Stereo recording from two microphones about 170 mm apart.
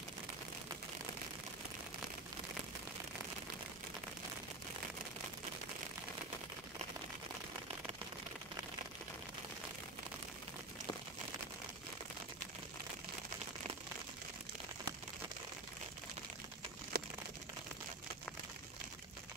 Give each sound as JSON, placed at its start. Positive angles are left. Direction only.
{"t": 16.9, "sound": "crumpling", "side_deg": -65}